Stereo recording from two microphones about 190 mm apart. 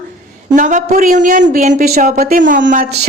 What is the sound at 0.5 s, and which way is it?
Speech, 45° right (ahead or behind).